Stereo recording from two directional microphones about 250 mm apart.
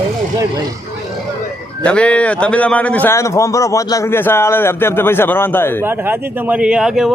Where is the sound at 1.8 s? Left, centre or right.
Centre.